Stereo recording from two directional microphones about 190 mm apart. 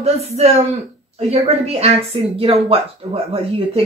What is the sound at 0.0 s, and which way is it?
Speech, 35° right (ahead or behind).